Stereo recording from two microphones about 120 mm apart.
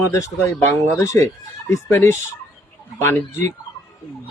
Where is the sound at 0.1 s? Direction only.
25° left (ahead or behind).